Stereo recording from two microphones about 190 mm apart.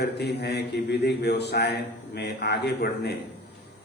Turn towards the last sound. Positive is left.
turn(degrees=60)  # may be behind; listen again after turning